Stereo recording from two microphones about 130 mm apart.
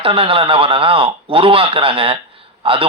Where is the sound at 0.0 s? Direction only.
45° right (ahead or behind).